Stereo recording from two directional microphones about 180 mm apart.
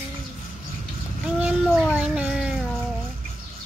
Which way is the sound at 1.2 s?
5° right (ahead or behind).